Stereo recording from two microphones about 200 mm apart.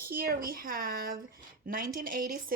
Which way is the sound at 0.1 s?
45° right (ahead or behind).